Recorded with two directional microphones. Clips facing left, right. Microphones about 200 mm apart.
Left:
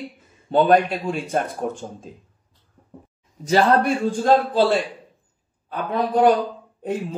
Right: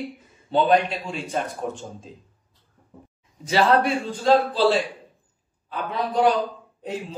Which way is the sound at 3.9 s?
50° left (ahead or behind).